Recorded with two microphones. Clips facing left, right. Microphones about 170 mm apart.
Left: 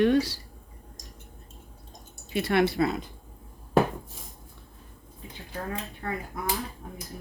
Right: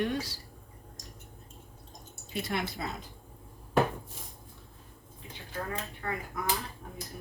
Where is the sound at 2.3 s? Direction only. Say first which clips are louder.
Left 10 dB; 70° left (ahead or behind).